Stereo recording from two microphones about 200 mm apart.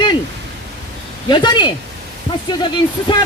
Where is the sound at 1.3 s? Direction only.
20° left (ahead or behind).